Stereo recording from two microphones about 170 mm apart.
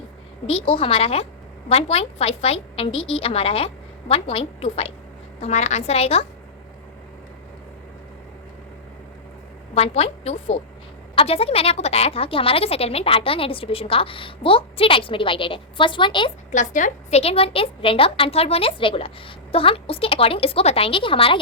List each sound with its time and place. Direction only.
0.4 s a woman's voice: 35° left (ahead or behind)
9.7 s a woman's voice: 35° left (ahead or behind)
16.5 s a woman's voice: 45° left (ahead or behind)